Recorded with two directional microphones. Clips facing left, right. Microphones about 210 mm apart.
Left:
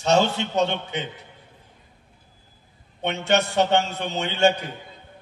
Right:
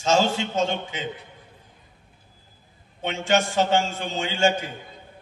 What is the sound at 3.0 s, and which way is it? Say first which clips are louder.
A man's voice: left 1 dB; 65° left (ahead or behind).